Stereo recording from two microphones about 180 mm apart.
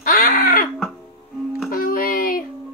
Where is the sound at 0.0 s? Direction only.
55° left (ahead or behind).